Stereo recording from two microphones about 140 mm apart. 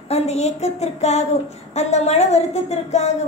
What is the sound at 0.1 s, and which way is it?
Speech, 50° left (ahead or behind).